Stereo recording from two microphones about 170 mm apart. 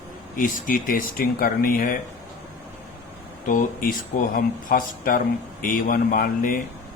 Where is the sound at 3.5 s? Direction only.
55° left (ahead or behind).